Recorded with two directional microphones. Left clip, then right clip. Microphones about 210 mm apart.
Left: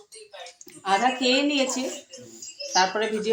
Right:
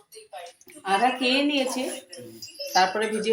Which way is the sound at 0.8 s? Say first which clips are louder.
Even; 15° left (ahead or behind).